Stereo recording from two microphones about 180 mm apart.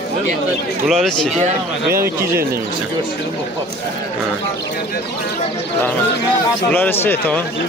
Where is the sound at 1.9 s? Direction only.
55° right (ahead or behind).